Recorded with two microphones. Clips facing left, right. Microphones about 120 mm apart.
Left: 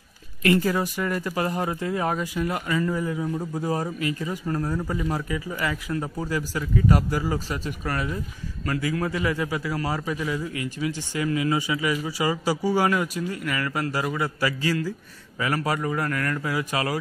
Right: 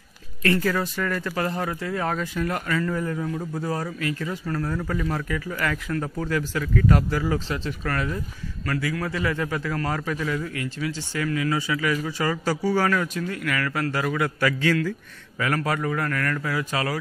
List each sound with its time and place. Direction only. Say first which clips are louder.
0.4 s a man's voice: left 1 dB; 20° left (ahead or behind)